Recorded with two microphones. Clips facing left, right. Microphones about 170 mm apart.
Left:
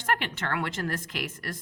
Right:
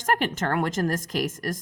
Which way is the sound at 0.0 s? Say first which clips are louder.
Right 5 dB; 40° right (ahead or behind).